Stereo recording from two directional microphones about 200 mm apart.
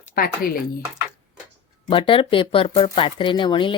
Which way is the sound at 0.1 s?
45° left (ahead or behind).